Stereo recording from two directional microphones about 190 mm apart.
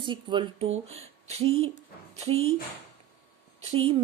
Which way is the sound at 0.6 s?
90° right.